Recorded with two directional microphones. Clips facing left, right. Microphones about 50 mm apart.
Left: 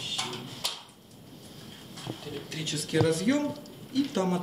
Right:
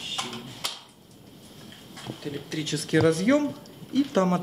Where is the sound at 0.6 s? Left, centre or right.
Right.